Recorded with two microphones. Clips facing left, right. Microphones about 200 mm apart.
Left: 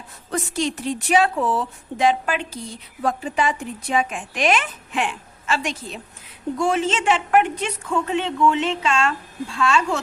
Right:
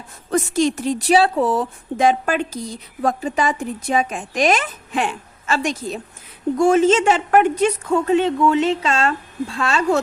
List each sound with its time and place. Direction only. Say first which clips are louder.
0.3 s a woman's voice: right 6 dB; 45° right (ahead or behind)